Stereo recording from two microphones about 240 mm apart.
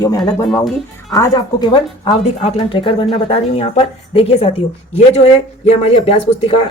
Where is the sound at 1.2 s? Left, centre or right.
Centre.